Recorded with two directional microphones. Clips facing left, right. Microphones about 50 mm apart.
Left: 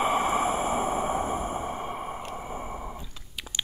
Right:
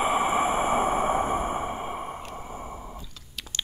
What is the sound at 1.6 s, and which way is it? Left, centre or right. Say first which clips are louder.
Sigh: right 1 dB; centre.